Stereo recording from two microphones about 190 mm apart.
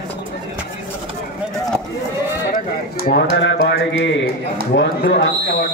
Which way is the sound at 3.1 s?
65° left (ahead or behind).